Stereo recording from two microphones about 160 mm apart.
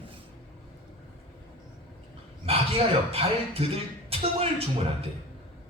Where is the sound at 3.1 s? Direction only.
40° right (ahead or behind).